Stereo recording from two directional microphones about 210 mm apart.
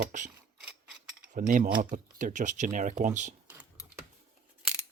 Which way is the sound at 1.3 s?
40° right (ahead or behind).